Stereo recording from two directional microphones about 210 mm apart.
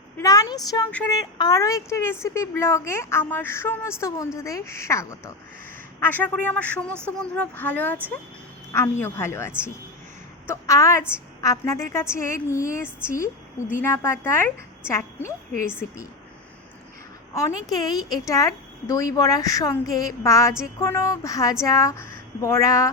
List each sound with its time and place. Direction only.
0.2 s a woman's voice: 15° left (ahead or behind)
0.9 s a woman's voice: 5° left (ahead or behind)
1.1 s a woman's voice: 20° left (ahead or behind)
17.3 s a woman's voice: 15° left (ahead or behind)